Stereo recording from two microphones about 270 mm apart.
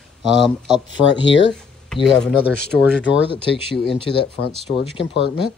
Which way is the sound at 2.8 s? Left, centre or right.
Centre.